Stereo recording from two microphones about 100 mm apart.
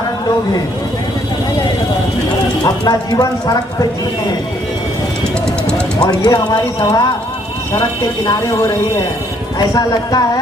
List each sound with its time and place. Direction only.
2.6 s speech: 40° left (ahead or behind)
6.0 s speech: 45° left (ahead or behind)
9.7 s speech: 40° left (ahead or behind)